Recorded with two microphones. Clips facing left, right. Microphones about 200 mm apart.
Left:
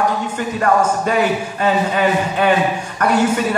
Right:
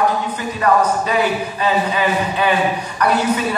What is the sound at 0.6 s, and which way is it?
A man's voice, 50° left (ahead or behind).